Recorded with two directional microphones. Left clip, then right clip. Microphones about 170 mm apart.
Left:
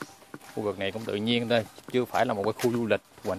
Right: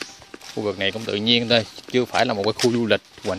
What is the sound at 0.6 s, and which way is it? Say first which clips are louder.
Speech: right 7 dB; 20° right (ahead or behind).